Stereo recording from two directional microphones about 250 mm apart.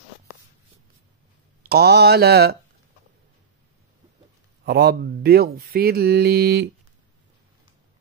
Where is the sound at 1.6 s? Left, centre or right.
Right.